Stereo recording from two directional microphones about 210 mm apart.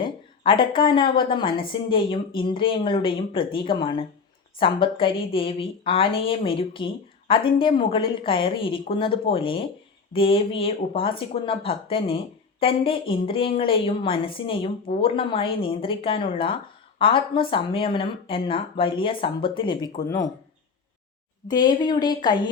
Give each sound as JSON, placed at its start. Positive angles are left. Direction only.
{"t": 0.0, "sound": "a woman's voice", "side_deg": 25}
{"t": 21.4, "sound": "speech", "side_deg": 20}